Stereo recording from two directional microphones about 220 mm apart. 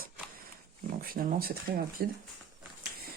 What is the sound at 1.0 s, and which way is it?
Speech, 40° right (ahead or behind).